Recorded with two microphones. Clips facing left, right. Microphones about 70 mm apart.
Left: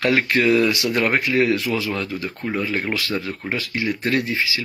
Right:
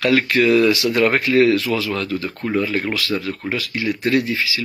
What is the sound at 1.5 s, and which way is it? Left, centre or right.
Speech, left.